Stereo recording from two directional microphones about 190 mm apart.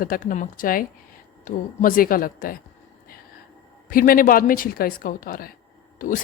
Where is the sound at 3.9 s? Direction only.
50° left (ahead or behind).